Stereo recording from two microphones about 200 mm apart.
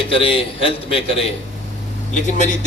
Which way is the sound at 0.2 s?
25° left (ahead or behind).